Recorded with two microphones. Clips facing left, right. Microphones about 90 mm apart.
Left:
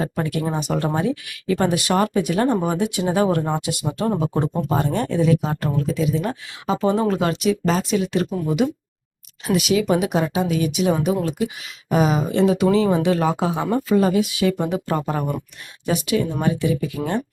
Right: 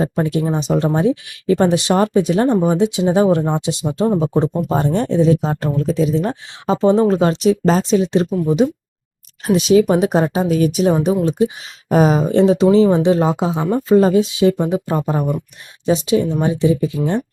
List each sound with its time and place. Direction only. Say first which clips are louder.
0.0 s speech: right 5 dB; 25° right (ahead or behind)
11.9 s speech: right 5 dB; 40° right (ahead or behind); by 13.8 s 20° right (ahead or behind)
13.8 s speech: right 7 dB; 30° right (ahead or behind)